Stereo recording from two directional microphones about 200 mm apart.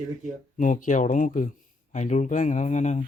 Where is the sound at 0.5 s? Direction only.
40° left (ahead or behind).